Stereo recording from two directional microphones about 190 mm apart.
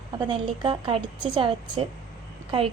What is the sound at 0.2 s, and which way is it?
A woman's voice, 25° right (ahead or behind).